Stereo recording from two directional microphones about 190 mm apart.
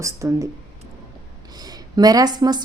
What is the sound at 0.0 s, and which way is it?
Speech, 15° right (ahead or behind).